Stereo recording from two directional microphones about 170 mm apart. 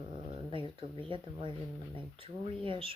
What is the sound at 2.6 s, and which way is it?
Speech, 30° right (ahead or behind).